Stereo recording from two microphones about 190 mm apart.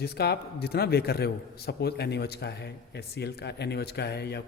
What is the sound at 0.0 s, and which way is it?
A man's voice, 55° left (ahead or behind).